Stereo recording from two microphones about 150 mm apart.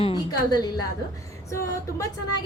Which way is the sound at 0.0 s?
30° left (ahead or behind).